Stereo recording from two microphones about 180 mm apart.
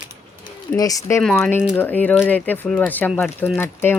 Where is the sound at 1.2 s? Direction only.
5° left (ahead or behind).